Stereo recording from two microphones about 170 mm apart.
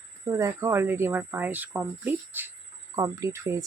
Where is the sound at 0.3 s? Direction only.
15° right (ahead or behind).